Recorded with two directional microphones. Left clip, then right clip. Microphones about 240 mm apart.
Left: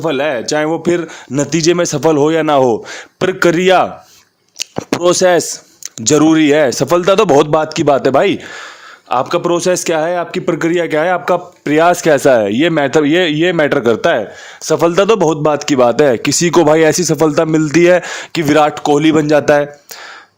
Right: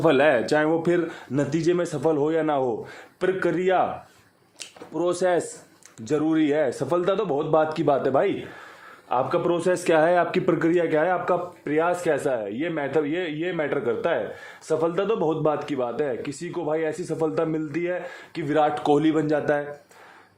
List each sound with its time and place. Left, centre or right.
0.0 s speech: left
11.6 s a man's voice: left
18.7 s speech: left